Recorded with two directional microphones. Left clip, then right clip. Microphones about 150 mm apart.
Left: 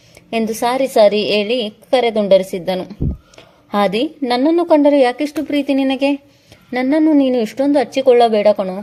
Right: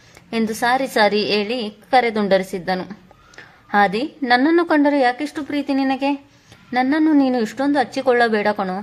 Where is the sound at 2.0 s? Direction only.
20° left (ahead or behind).